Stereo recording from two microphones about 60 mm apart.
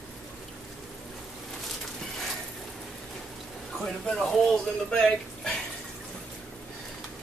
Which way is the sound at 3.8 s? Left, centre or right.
Centre.